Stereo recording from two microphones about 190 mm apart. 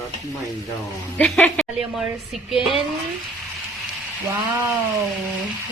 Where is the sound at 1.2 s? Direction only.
5° left (ahead or behind).